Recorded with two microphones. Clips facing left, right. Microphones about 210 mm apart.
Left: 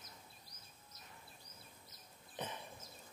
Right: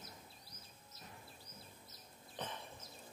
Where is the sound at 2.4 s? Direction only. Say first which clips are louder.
Left 1 dB; 15° left (ahead or behind).